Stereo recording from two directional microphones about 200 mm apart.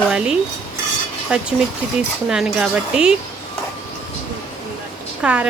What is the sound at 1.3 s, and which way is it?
Speech, 5° right (ahead or behind).